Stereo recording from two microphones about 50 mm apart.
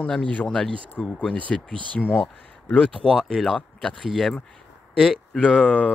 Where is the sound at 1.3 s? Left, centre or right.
Left.